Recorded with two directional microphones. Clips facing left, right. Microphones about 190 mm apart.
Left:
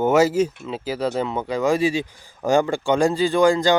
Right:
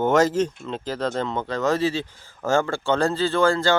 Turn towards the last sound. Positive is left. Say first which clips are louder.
# left 3 dB
turn(degrees=15)  # may be behind; listen again after turning